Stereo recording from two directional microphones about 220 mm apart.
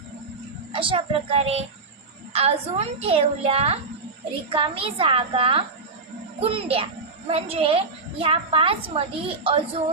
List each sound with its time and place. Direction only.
0.7 s a woman's voice: 25° right (ahead or behind)